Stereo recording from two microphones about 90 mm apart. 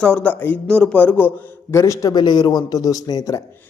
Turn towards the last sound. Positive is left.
turn(degrees=45)  # may be behind; listen again after turning